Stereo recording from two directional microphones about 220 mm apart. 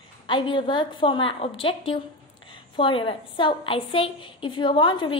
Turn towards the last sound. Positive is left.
turn(degrees=20)  # may be behind; listen again after turning